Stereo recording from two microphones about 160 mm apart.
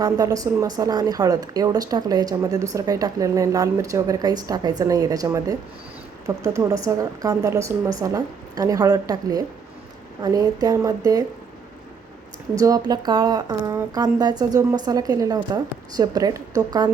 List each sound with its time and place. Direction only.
0.0 s speech: 20° right (ahead or behind)
12.5 s speech: 20° right (ahead or behind)